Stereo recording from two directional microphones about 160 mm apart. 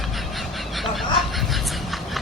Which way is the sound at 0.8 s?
Centre (ahead or behind).